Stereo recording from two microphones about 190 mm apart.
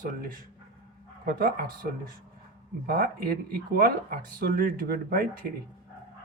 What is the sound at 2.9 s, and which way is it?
Speech, 50° right (ahead or behind).